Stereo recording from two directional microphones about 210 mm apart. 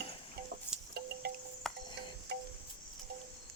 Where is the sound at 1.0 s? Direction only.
50° right (ahead or behind).